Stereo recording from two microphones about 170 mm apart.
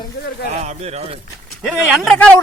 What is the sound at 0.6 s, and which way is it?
Speech, 40° right (ahead or behind).